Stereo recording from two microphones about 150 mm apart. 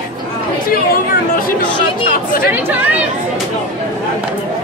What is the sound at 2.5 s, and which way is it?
Speech, 10° right (ahead or behind).